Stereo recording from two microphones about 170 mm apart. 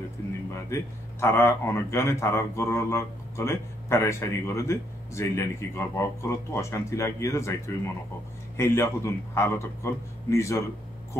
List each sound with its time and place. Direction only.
1.2 s speech: 15° left (ahead or behind)